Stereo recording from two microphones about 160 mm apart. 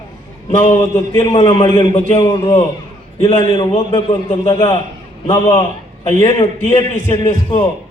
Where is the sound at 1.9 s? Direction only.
40° left (ahead or behind).